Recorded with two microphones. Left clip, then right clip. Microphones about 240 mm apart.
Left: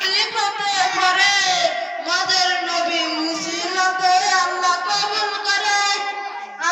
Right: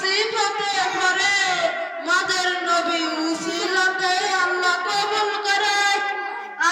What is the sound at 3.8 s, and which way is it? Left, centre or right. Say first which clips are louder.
Music: left 5 dB; centre.